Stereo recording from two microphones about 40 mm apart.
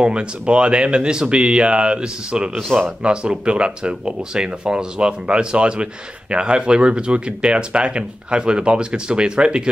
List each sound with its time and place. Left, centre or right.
0.0 s speech: right